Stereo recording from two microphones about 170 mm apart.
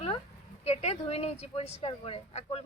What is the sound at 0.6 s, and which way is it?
Speech, 40° left (ahead or behind).